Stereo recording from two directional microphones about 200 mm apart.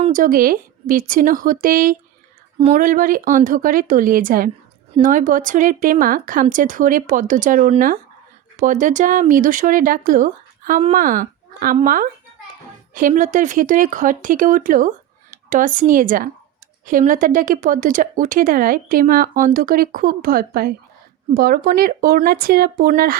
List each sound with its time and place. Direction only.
0.1 s a woman's voice: 45° right (ahead or behind)